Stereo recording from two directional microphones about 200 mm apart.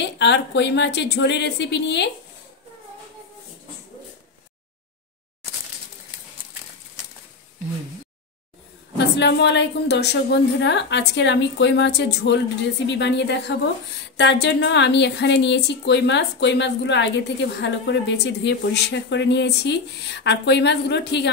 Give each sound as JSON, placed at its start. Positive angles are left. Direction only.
{"t": 0.0, "sound": "a woman's voice", "side_deg": 60}
{"t": 8.9, "sound": "a woman's voice", "side_deg": 60}